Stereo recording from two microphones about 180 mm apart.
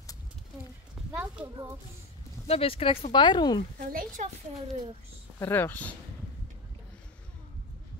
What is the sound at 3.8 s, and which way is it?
Speech, 50° right (ahead or behind).